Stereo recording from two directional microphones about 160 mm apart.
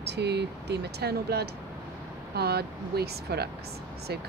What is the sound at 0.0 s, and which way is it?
Speech, 90° right.